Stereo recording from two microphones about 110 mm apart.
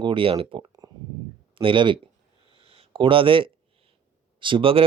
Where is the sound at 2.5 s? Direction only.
60° right (ahead or behind).